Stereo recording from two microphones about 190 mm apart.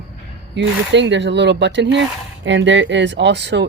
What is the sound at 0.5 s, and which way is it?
Speech, 70° right (ahead or behind).